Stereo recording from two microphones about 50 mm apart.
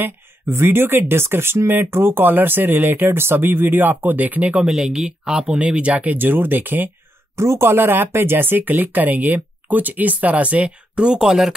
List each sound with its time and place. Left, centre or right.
0.0 s speech: right
4.6 s speech: centre
6.1 s speech: right
7.3 s speech: right; by 11.5 s centre